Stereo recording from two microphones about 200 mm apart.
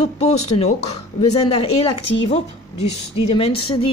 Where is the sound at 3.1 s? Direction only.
30° left (ahead or behind).